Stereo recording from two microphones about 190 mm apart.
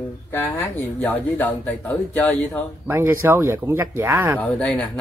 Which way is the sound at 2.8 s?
10° right (ahead or behind).